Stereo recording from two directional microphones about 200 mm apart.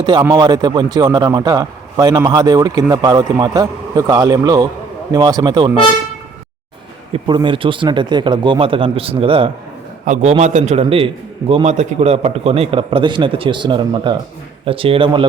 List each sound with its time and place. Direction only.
0.0 s a man's voice: 20° right (ahead or behind)
7.1 s a man's voice: 25° right (ahead or behind)